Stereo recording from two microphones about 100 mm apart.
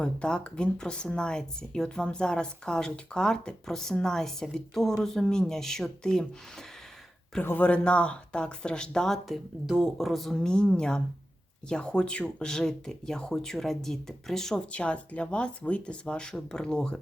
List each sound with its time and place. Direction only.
0.0 s a woman's voice: 10° left (ahead or behind)
7.4 s speech: 15° left (ahead or behind)